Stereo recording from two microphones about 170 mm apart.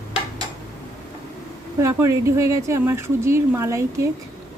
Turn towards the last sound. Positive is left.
turn(degrees=-15)  # may be behind; listen again after turning